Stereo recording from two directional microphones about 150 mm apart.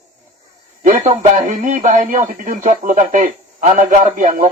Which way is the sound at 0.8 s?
60° right (ahead or behind).